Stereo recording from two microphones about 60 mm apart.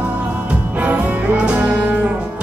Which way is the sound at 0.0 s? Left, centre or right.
Right.